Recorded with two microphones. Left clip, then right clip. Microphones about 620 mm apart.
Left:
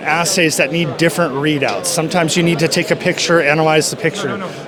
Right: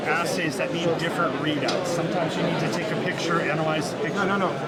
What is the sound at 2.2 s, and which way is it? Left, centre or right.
Speech, left.